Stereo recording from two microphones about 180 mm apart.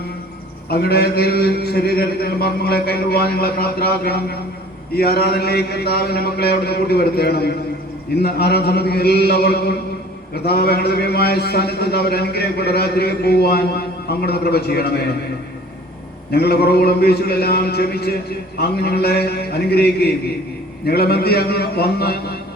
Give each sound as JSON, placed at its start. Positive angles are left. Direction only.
{"t": 0.7, "sound": "a man's voice", "side_deg": 60}
{"t": 16.3, "sound": "a man's voice", "side_deg": 60}